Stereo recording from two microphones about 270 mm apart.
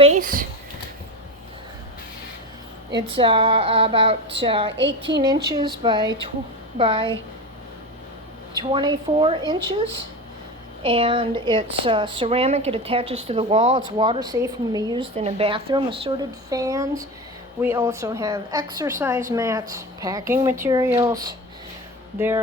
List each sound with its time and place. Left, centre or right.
0.0 s speech: right
2.9 s a woman's voice: centre
8.5 s a woman's voice: centre
10.8 s a woman's voice: centre